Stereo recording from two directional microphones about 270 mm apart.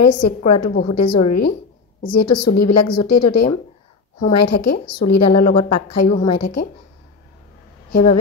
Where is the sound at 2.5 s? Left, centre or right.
Left.